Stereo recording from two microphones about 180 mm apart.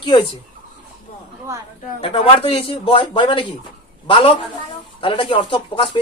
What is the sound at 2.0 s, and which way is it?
A man's voice, 30° left (ahead or behind).